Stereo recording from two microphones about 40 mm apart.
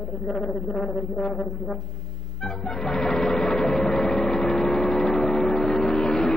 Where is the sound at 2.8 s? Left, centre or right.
Centre.